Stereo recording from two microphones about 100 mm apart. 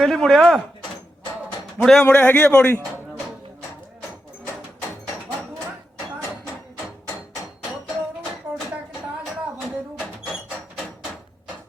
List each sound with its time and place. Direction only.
0.0 s speech: centre (ahead or behind)
1.8 s speech: 5° left (ahead or behind)
2.1 s speech: 20° left (ahead or behind)
9.6 s a sound: 5° left (ahead or behind)